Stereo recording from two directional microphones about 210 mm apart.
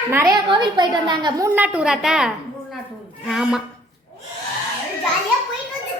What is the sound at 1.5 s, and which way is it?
A woman's voice, 5° right (ahead or behind).